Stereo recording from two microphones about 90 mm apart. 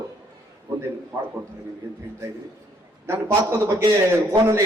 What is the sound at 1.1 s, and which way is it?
Speech, 30° right (ahead or behind).